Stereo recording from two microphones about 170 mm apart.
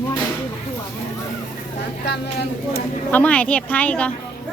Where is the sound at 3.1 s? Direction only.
10° left (ahead or behind).